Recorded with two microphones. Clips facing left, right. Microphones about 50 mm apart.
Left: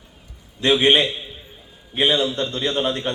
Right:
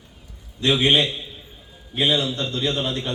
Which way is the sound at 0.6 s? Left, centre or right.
Left.